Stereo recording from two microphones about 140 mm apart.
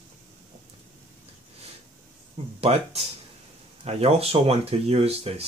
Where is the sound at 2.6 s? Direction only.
45° right (ahead or behind).